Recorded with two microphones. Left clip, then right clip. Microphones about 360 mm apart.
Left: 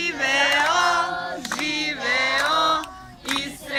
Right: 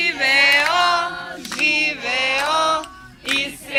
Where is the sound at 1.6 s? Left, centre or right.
Centre.